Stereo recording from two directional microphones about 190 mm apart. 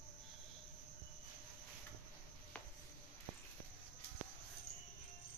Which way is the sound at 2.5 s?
10° left (ahead or behind).